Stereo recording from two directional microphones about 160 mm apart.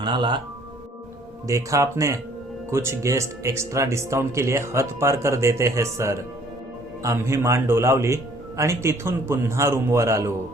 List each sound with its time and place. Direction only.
0.0 s speech: 30° right (ahead or behind)
1.5 s speech: 20° right (ahead or behind)